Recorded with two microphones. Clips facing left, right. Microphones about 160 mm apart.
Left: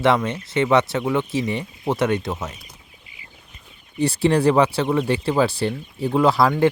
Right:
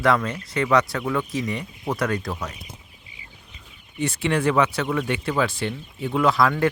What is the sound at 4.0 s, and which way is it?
Speech, 35° left (ahead or behind).